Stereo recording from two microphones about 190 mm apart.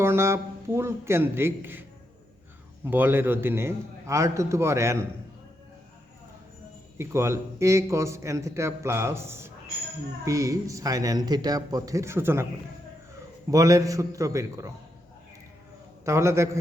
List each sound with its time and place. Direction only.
0.0 s a man's voice: 15° right (ahead or behind)
2.8 s a man's voice: 10° right (ahead or behind)
7.0 s a man's voice: 15° right (ahead or behind)
13.5 s a man's voice: 15° right (ahead or behind)
16.0 s a man's voice: 15° right (ahead or behind)